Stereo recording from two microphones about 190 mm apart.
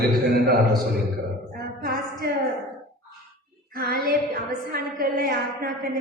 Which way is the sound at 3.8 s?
50° right (ahead or behind).